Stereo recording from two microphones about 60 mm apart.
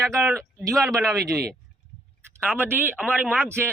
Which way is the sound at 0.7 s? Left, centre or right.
Right.